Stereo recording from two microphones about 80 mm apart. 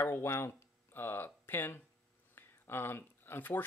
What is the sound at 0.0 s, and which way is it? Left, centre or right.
Speech, left.